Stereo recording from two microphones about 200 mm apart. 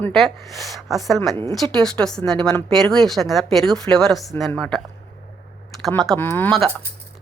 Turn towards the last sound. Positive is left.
turn(degrees=5)  # may be behind; listen again after turning